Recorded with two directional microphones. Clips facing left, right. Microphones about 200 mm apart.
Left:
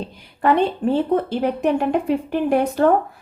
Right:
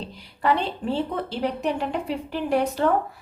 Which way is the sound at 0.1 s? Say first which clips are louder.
Left 5 dB; 55° left (ahead or behind).